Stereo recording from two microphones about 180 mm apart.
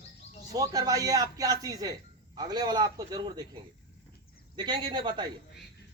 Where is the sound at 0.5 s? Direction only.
20° right (ahead or behind).